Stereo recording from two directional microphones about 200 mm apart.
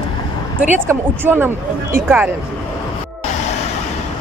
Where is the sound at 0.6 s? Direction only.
10° right (ahead or behind).